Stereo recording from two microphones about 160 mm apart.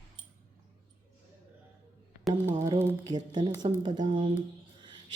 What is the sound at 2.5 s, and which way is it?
A woman's voice, 20° right (ahead or behind).